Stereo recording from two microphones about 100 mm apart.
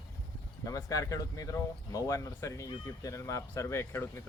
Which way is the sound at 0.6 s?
35° left (ahead or behind).